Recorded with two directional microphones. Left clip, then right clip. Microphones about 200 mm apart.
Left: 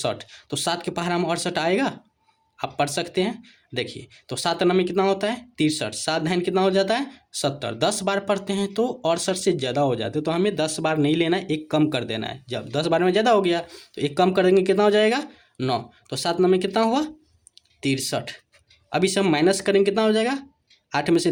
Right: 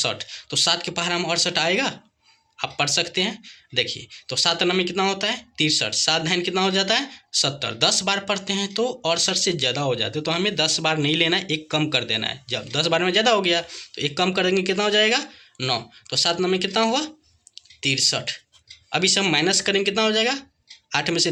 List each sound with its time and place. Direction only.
0.0 s speech: 45° left (ahead or behind)